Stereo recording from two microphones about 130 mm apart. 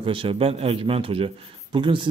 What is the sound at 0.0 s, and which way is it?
A man's voice, 45° right (ahead or behind).